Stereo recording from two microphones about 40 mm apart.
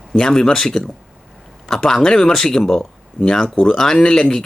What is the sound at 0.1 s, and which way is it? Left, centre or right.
Speech, centre.